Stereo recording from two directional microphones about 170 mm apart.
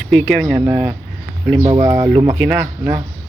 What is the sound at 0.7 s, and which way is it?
Speech, 15° right (ahead or behind).